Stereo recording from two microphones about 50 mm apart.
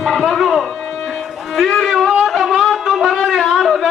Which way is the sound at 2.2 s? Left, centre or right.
Centre.